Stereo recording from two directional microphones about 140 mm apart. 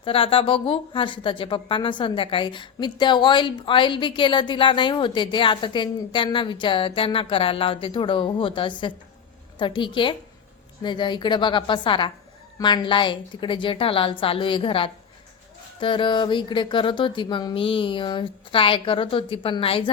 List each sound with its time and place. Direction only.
0.0 s speech: 40° left (ahead or behind)